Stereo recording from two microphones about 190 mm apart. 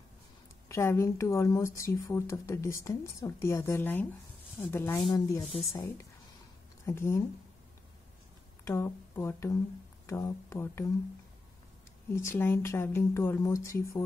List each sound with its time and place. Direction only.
0.7 s speech: 15° left (ahead or behind)
8.6 s speech: 15° left (ahead or behind)
12.1 s speech: 15° left (ahead or behind)